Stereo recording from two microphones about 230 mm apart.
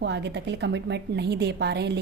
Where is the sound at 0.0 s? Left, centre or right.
Right.